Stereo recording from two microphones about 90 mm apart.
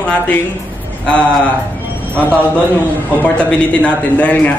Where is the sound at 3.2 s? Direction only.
15° left (ahead or behind).